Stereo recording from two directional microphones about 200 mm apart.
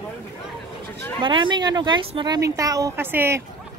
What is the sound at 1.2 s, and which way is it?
A woman's voice, 25° right (ahead or behind).